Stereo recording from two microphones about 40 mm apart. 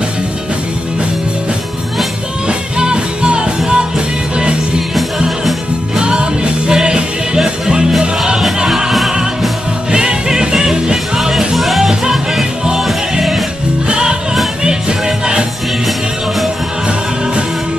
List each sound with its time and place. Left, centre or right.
2.4 s music: right
5.9 s music: right; by 9.1 s centre
9.8 s music: centre
11.1 s music: centre
13.8 s music: right